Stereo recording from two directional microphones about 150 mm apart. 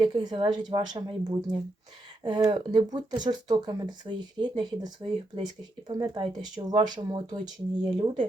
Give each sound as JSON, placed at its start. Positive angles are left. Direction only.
{"t": 0.0, "sound": "speech", "side_deg": -30}